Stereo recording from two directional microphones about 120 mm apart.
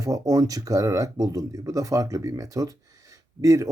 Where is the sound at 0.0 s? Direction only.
30° right (ahead or behind).